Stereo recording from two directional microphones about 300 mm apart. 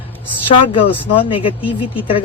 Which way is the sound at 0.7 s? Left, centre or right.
Centre.